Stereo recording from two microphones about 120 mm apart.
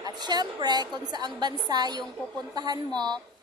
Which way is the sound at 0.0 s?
35° right (ahead or behind).